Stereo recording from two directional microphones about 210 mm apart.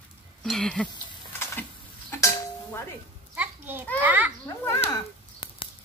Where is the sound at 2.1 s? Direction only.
10° left (ahead or behind).